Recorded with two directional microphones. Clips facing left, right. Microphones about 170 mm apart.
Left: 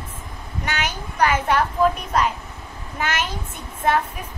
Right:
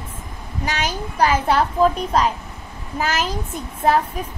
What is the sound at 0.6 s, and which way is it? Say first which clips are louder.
A child's voice: right 3 dB; 30° right (ahead or behind).